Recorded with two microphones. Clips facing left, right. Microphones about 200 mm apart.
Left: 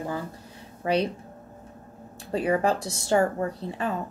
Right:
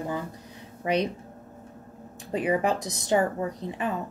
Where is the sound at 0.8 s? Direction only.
35° left (ahead or behind).